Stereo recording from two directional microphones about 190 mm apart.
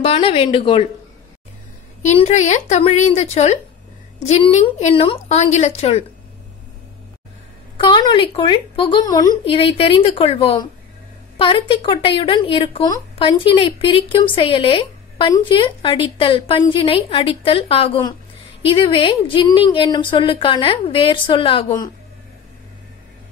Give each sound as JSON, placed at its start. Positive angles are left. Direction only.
{"t": 0.0, "sound": "speech", "side_deg": 30}
{"t": 2.0, "sound": "a woman's voice", "side_deg": 35}
{"t": 7.7, "sound": "speech", "side_deg": 25}